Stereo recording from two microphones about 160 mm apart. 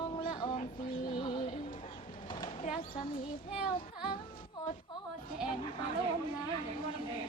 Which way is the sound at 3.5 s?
35° left (ahead or behind).